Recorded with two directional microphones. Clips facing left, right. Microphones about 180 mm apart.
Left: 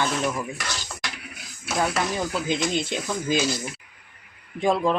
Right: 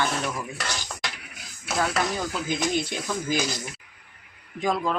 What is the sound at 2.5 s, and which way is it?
Speech, 20° left (ahead or behind).